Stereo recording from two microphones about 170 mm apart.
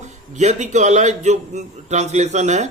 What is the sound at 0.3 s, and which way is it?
A man's voice, 40° right (ahead or behind).